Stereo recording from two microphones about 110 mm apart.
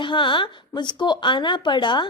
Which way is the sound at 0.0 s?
50° left (ahead or behind).